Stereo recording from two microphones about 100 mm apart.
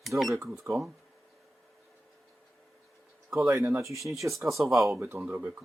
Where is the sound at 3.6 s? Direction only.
30° right (ahead or behind).